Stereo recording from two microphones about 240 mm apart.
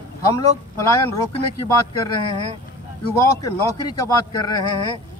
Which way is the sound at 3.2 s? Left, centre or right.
Centre.